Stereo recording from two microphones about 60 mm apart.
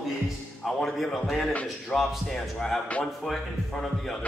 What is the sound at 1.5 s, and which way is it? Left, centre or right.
Speech, left.